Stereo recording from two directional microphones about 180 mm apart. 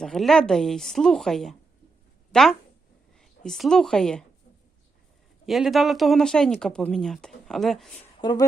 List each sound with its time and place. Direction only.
0.0 s a woman's voice: centre (ahead or behind)
5.5 s speech: centre (ahead or behind)
8.2 s speech: 25° left (ahead or behind)